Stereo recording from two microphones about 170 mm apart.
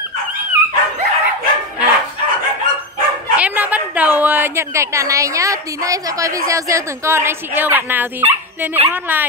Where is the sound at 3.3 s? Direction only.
10° right (ahead or behind).